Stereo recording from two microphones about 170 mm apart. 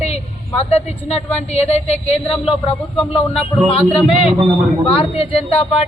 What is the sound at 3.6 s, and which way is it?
Speech, 35° left (ahead or behind).